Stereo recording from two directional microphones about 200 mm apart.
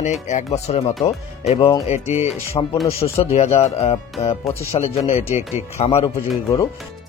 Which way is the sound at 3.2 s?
30° left (ahead or behind).